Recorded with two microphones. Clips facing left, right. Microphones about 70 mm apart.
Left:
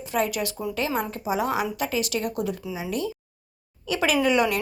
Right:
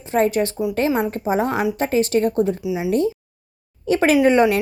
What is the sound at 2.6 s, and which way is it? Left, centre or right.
Speech, centre.